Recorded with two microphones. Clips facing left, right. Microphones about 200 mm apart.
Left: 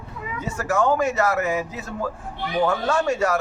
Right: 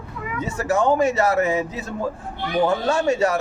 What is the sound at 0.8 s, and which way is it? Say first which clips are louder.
Speech: right 2 dB; 25° right (ahead or behind).